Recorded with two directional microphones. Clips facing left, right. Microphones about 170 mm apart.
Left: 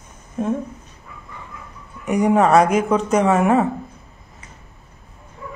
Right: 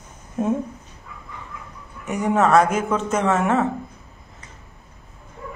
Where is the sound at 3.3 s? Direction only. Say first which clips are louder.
Left 2 dB; 10° left (ahead or behind).